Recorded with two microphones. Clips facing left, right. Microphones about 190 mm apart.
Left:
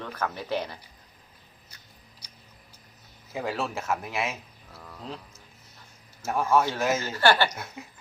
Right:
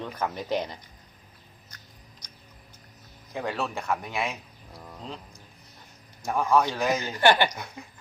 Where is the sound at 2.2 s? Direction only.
10° left (ahead or behind).